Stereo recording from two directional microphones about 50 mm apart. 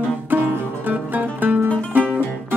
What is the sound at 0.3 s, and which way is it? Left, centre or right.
Music, right.